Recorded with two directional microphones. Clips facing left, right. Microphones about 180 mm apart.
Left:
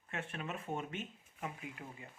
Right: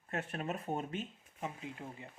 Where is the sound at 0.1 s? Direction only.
40° right (ahead or behind).